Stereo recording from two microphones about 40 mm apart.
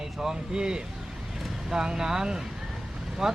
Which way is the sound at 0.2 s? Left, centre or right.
Centre.